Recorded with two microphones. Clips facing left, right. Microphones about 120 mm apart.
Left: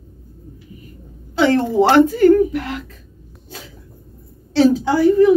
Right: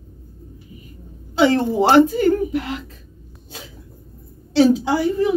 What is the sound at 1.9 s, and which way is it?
Speech, 20° right (ahead or behind).